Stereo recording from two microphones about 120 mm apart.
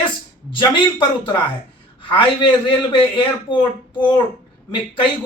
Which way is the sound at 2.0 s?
45° left (ahead or behind).